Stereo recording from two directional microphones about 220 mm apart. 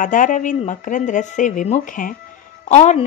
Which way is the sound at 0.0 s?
35° left (ahead or behind).